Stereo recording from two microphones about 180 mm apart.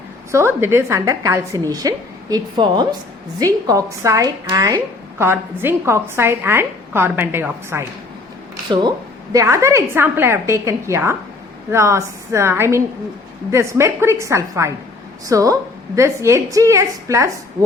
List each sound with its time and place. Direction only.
0.3 s a woman's voice: 15° right (ahead or behind)
9.3 s a woman's voice: 15° right (ahead or behind)